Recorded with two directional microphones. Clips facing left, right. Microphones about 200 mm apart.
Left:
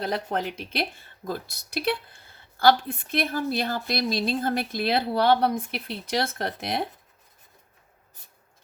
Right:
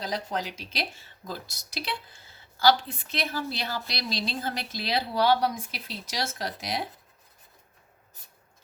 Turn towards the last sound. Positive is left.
turn(degrees=55)  # may be behind; listen again after turning